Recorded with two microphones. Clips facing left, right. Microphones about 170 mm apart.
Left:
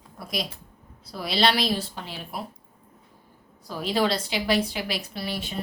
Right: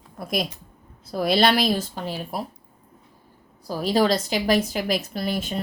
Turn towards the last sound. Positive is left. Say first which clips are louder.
# right 5 dB
turn(degrees=-45)  # may be behind; listen again after turning